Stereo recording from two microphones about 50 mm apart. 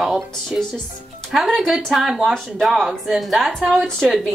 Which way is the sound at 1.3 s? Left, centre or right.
Centre.